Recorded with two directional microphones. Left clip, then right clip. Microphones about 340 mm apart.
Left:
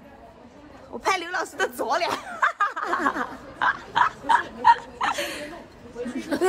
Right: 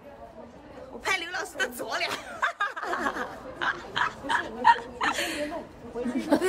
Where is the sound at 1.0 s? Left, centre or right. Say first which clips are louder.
Left 4 dB; centre.